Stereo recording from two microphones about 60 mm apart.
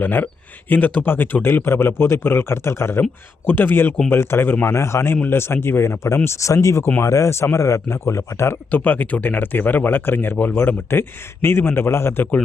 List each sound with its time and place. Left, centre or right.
0.0 s speech: left
5.1 s speech: left
8.7 s speech: left
10.3 s speech: left